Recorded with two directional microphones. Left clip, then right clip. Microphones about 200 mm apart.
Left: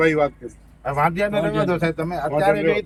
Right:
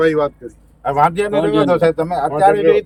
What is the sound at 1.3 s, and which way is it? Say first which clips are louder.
Speech: right 7 dB; 25° right (ahead or behind).